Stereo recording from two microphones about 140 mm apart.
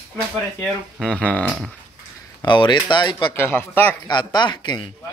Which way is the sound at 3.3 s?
15° left (ahead or behind).